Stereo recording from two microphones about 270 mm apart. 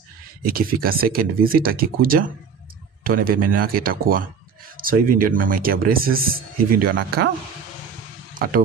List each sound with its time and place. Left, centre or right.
0.5 s a man's voice: right